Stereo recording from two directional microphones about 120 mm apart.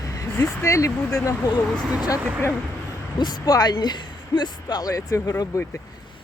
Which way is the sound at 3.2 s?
35° left (ahead or behind).